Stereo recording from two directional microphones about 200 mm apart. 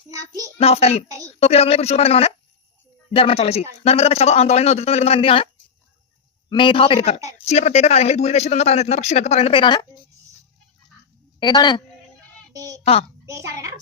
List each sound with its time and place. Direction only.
0.1 s a child's voice: 15° right (ahead or behind)
0.6 s a man's voice: 30° left (ahead or behind)
6.5 s a man's voice: 25° left (ahead or behind)
11.3 s a man's voice: 20° left (ahead or behind)
12.5 s a child's voice: 15° right (ahead or behind)
12.8 s a man's voice: 30° left (ahead or behind)
13.2 s a woman's voice: 15° right (ahead or behind)